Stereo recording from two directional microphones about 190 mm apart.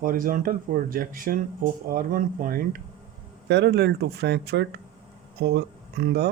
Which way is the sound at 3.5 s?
65° right (ahead or behind).